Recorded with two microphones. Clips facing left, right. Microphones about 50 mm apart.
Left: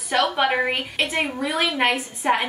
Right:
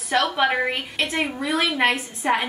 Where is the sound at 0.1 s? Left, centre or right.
Centre.